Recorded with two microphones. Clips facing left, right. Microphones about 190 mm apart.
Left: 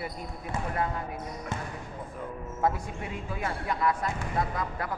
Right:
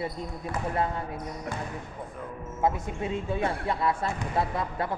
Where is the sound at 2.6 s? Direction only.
25° right (ahead or behind).